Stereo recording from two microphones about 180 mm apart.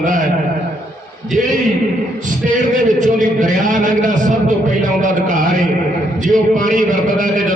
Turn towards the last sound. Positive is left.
turn(degrees=-45)  # may be behind; listen again after turning